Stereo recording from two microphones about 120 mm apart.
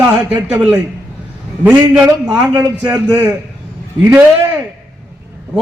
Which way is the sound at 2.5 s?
15° right (ahead or behind).